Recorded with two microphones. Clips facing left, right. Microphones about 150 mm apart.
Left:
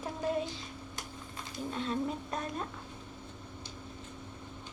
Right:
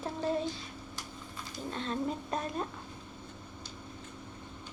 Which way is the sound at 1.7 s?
5° left (ahead or behind).